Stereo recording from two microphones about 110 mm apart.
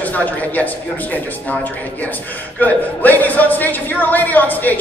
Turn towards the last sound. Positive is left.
turn(degrees=15)  # may be behind; listen again after turning